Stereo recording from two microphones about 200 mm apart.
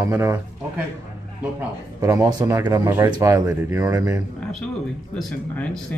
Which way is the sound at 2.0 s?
15° right (ahead or behind).